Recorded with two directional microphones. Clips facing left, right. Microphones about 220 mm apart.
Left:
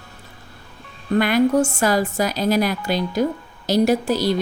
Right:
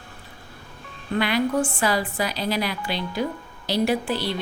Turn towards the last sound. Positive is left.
turn(degrees=40)  # may be behind; listen again after turning